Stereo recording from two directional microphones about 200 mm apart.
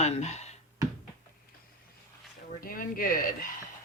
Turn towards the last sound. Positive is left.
turn(degrees=45)  # may be behind; listen again after turning